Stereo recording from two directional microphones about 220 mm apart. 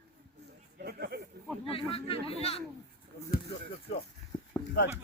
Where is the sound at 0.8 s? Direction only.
45° right (ahead or behind).